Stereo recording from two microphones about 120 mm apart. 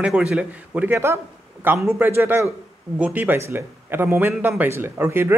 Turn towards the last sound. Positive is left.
turn(degrees=-20)  # may be behind; listen again after turning